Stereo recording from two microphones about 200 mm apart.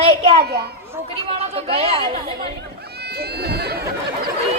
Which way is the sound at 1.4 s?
30° right (ahead or behind).